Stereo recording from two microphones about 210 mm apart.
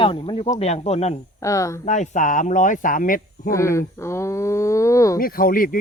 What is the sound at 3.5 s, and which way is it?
Speech, 15° left (ahead or behind).